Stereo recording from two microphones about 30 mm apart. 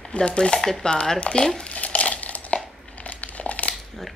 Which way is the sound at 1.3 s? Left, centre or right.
Left.